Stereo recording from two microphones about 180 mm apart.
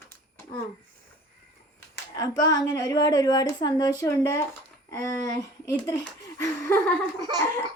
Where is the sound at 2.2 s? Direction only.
20° left (ahead or behind).